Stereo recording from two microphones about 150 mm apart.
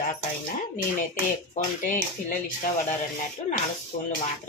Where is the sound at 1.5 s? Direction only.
60° left (ahead or behind).